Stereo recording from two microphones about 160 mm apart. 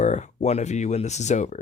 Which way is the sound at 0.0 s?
45° left (ahead or behind).